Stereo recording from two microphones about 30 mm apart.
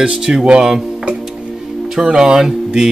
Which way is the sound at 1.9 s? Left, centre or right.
Right.